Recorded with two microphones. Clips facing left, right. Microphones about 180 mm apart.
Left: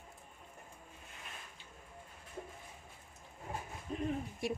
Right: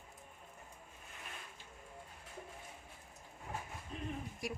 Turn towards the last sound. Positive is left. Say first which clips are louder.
# left 5 dB
turn(degrees=25)  # may be behind; listen again after turning